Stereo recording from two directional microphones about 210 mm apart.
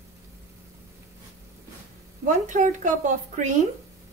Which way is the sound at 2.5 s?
35° right (ahead or behind).